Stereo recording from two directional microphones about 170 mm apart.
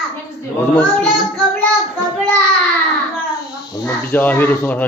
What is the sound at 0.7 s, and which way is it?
Speech, 5° left (ahead or behind).